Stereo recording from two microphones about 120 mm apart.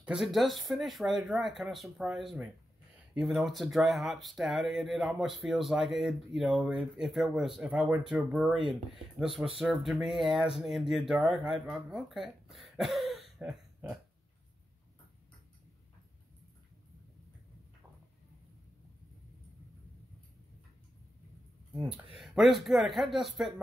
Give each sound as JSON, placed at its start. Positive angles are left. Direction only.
{"t": 0.0, "sound": "speech", "side_deg": -5}
{"t": 9.6, "sound": "speech", "side_deg": 0}
{"t": 21.8, "sound": "speech", "side_deg": -50}
{"t": 22.2, "sound": "speech", "side_deg": 0}